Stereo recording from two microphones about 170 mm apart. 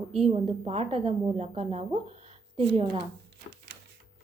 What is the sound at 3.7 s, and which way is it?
Typewriter, 90° right.